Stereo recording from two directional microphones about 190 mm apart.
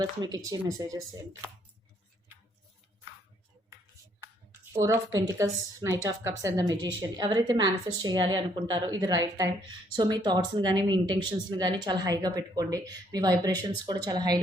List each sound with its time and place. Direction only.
0.2 s speech: 20° right (ahead or behind)
4.2 s a sound: 15° right (ahead or behind)
5.3 s a woman's voice: 15° right (ahead or behind)